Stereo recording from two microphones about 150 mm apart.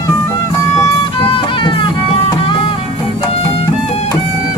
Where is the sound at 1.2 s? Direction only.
35° left (ahead or behind).